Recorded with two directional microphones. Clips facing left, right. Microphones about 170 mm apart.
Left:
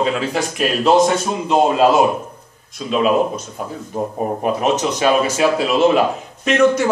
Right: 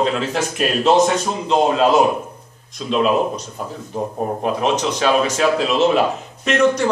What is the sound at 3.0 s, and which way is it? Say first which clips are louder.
Speech: left 2 dB; 50° left (ahead or behind).